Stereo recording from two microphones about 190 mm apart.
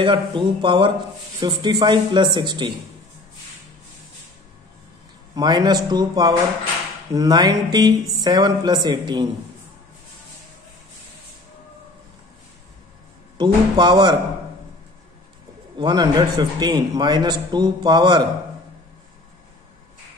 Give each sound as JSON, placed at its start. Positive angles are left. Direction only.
{"t": 0.0, "sound": "a man's voice", "side_deg": -25}
{"t": 5.3, "sound": "a man's voice", "side_deg": -20}
{"t": 13.4, "sound": "a man's voice", "side_deg": -20}
{"t": 15.8, "sound": "a man's voice", "side_deg": -25}